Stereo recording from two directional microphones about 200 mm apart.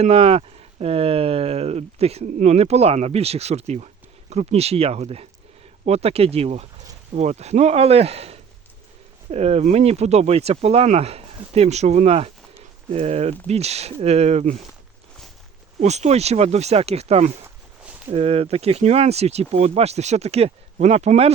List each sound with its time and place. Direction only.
0.0 s speech: 30° right (ahead or behind)
15.8 s speech: 35° right (ahead or behind)